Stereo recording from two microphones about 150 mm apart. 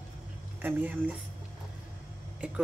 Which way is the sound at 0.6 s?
10° right (ahead or behind).